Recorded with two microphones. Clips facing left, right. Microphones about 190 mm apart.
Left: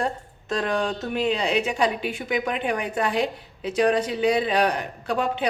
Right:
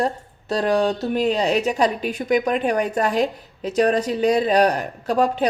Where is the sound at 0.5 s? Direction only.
35° right (ahead or behind).